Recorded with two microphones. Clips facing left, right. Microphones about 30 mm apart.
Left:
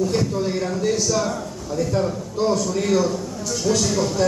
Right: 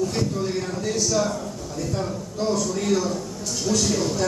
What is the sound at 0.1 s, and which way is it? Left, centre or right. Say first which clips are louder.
Speech: left 3 dB; left.